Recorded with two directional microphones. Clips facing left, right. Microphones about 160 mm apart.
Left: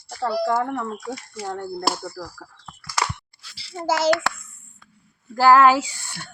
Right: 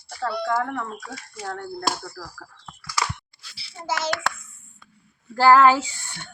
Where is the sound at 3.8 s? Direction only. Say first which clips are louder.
Left 8 dB; 45° left (ahead or behind).